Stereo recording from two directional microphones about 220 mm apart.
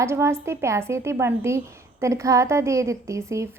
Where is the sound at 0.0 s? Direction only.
10° right (ahead or behind).